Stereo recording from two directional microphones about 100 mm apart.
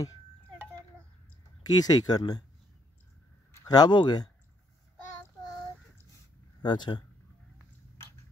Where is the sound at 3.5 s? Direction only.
40° left (ahead or behind).